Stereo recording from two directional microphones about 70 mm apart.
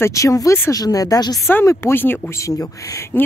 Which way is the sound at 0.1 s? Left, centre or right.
Left.